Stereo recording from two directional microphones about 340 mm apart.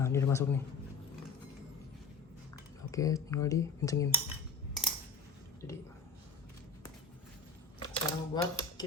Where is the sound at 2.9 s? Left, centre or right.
Centre.